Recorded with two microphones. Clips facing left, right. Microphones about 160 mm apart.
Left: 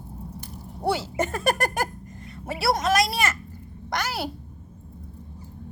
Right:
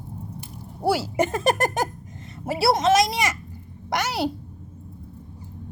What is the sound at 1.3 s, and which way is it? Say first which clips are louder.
Speech: even; 20° right (ahead or behind).